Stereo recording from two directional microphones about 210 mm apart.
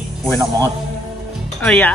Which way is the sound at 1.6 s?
5° left (ahead or behind).